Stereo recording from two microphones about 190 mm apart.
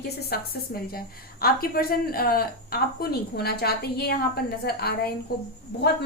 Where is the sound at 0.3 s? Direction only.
55° left (ahead or behind).